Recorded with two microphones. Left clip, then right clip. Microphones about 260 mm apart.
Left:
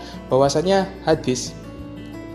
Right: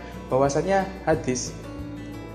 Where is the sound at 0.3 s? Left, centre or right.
Left.